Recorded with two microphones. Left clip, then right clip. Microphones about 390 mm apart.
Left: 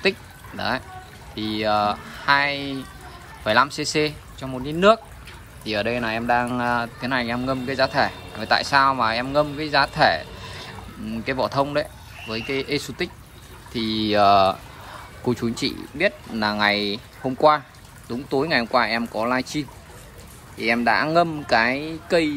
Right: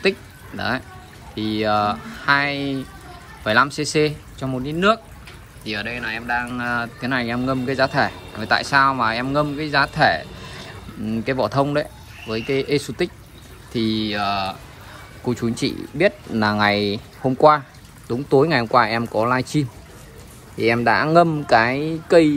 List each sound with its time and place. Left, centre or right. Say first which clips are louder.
0.6 s speech: right 1 dB; centre
20.5 s speech: right 2 dB; centre